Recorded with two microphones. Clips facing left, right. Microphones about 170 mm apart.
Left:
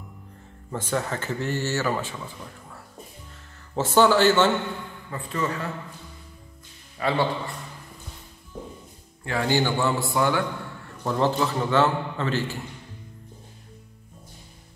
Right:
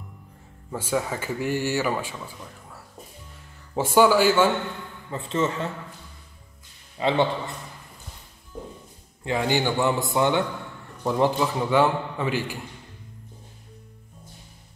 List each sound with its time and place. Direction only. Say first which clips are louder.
0.7 s speech: right 1 dB; 10° right (ahead or behind)
3.7 s speech: right 1 dB; 10° right (ahead or behind)
5.1 s a man's voice: right 3 dB; 25° right (ahead or behind)
7.0 s a man's voice: right 2 dB; 20° right (ahead or behind)
9.2 s a man's voice: even; 20° right (ahead or behind)